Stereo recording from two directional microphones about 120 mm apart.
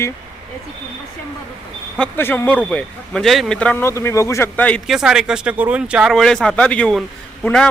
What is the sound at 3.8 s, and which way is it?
Speech, 25° left (ahead or behind).